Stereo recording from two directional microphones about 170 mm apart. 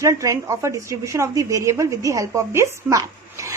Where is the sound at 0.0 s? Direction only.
20° right (ahead or behind).